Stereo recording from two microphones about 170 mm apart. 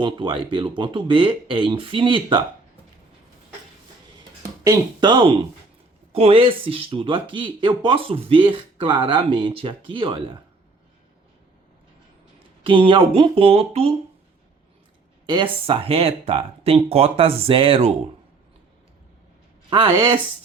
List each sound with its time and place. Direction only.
0.0 s speech: 30° right (ahead or behind)
4.6 s speech: 25° right (ahead or behind)
12.6 s speech: 30° right (ahead or behind)
15.3 s speech: 30° right (ahead or behind)
19.7 s speech: 30° right (ahead or behind)